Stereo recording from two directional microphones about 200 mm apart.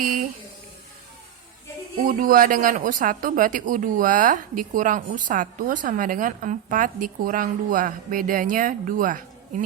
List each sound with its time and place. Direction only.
0.0 s speech: 45° right (ahead or behind)
2.0 s speech: 45° right (ahead or behind)